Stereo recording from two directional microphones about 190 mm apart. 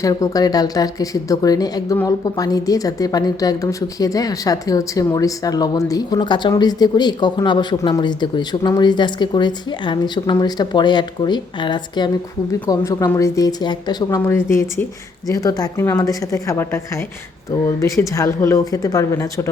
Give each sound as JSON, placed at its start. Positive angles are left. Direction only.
{"t": 0.0, "sound": "a woman's voice", "side_deg": 20}